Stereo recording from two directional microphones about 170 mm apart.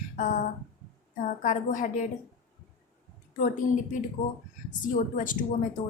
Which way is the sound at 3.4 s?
50° left (ahead or behind).